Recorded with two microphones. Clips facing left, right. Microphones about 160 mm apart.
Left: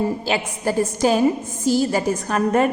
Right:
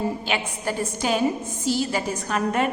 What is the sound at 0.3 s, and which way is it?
A woman's voice, 40° left (ahead or behind).